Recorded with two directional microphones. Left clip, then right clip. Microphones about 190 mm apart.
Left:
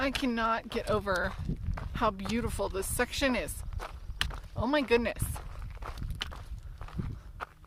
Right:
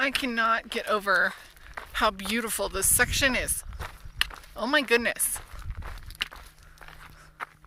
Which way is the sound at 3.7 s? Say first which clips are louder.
Right 5 dB; 10° right (ahead or behind).